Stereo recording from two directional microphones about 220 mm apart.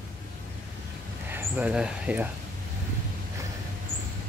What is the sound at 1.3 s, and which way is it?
Speech, 5° right (ahead or behind).